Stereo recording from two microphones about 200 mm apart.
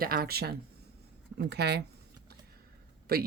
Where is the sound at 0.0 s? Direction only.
45° right (ahead or behind).